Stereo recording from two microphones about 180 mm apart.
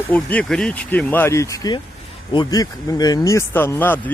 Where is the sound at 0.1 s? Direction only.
10° left (ahead or behind).